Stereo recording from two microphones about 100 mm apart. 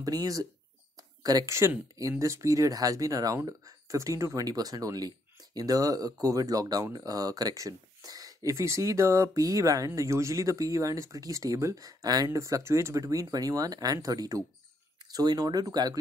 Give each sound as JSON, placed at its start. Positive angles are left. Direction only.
{"t": 0.0, "sound": "speech", "side_deg": -40}